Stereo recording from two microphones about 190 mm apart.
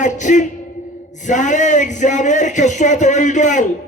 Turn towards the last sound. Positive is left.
turn(degrees=40)  # may be behind; listen again after turning